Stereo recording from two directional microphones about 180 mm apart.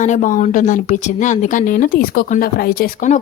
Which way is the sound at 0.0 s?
45° left (ahead or behind).